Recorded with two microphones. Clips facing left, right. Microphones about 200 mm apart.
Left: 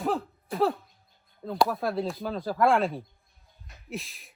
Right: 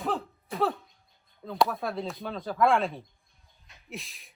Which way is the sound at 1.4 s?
Centre (ahead or behind).